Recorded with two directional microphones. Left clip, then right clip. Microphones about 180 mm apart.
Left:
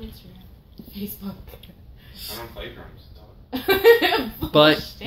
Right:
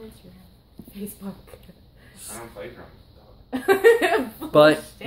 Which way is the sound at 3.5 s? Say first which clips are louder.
Left 1 dB; 55° right (ahead or behind).